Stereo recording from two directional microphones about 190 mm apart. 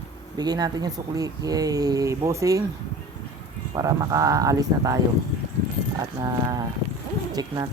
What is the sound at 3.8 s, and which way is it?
Speech, 20° right (ahead or behind).